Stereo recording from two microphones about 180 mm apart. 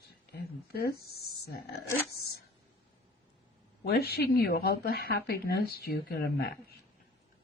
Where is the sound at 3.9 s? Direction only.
60° left (ahead or behind).